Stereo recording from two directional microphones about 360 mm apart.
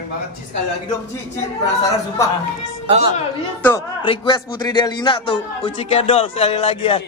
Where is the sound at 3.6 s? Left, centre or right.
Centre.